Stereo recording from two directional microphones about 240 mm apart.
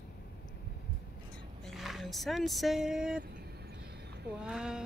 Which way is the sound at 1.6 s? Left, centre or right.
Centre.